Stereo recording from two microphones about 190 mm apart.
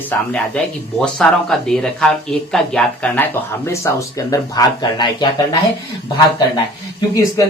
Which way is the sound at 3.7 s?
15° left (ahead or behind).